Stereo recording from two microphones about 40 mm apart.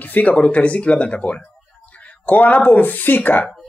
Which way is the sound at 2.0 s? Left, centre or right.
Left.